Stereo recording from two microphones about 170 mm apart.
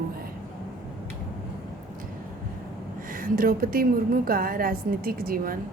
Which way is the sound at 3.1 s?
55° right (ahead or behind).